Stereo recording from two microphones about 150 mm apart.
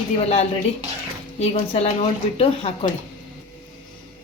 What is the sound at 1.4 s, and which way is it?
A woman's voice, 45° left (ahead or behind).